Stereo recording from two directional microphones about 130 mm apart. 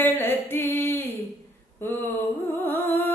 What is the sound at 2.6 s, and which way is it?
Music, 15° left (ahead or behind).